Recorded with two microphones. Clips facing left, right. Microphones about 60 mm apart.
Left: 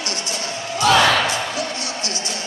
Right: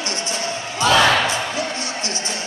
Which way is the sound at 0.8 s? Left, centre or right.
Right.